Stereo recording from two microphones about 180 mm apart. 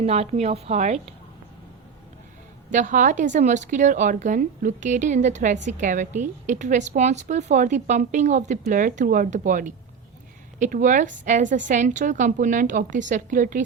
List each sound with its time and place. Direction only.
0.0 s a woman's voice: 35° right (ahead or behind)
2.7 s a woman's voice: 45° right (ahead or behind)